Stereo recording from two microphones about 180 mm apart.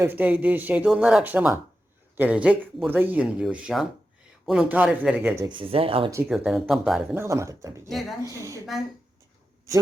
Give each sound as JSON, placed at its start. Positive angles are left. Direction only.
{"t": 0.0, "sound": "speech", "side_deg": -10}
{"t": 5.5, "sound": "speech", "side_deg": -30}
{"t": 6.2, "sound": "speech", "side_deg": -5}
{"t": 7.2, "sound": "speech", "side_deg": -15}